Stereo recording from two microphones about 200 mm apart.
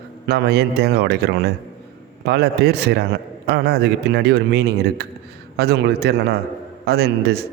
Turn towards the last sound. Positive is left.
turn(degrees=-55)  # may be behind; listen again after turning